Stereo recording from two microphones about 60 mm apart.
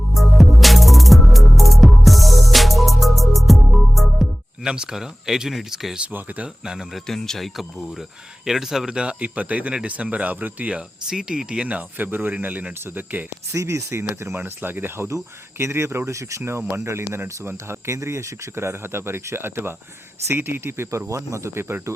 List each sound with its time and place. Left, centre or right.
0.1 s music: centre
4.6 s speech: centre
6.0 s speech: right
6.7 s speech: centre
7.1 s speech: centre
9.2 s speech: right
11.9 s speech: right
13.5 s speech: right
21.1 s speech: right